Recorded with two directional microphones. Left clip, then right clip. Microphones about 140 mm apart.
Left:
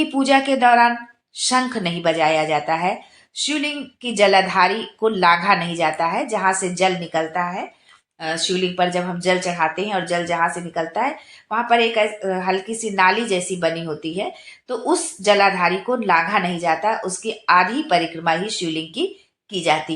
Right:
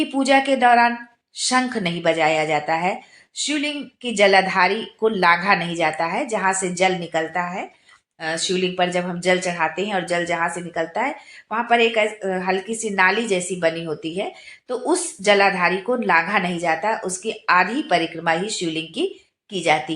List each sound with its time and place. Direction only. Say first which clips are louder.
0.0 s speech: left 1 dB; 35° left (ahead or behind)